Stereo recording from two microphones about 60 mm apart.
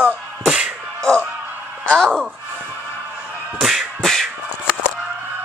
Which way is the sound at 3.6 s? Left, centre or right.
Centre.